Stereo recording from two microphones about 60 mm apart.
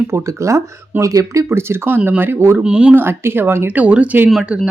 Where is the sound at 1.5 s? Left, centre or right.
Right.